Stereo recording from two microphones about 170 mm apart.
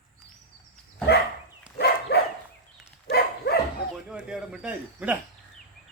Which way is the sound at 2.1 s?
75° left (ahead or behind).